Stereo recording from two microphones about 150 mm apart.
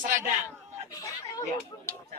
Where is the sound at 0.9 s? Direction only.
20° left (ahead or behind).